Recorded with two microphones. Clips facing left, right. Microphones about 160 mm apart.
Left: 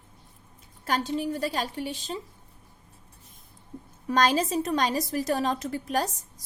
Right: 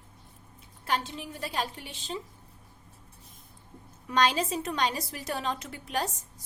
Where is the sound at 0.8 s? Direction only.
40° left (ahead or behind).